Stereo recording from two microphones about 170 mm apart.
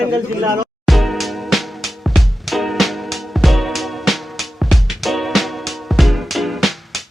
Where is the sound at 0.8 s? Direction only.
Centre (ahead or behind).